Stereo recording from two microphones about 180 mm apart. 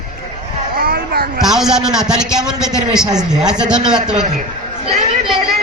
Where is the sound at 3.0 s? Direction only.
20° right (ahead or behind).